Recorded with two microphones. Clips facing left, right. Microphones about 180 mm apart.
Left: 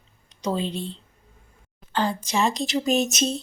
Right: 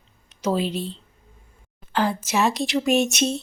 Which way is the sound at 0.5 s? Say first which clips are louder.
Right 3 dB; 85° right.